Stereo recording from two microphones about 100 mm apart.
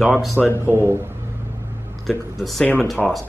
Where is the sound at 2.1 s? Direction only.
Centre (ahead or behind).